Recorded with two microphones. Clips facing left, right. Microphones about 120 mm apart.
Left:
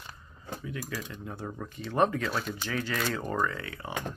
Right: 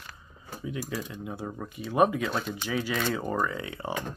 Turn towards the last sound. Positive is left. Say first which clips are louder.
# right 1 dB
turn(degrees=-20)  # may be behind; listen again after turning